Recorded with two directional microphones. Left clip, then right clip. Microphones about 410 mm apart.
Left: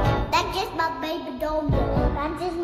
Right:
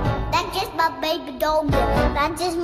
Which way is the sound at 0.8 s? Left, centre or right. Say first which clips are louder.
Right 8 dB; centre.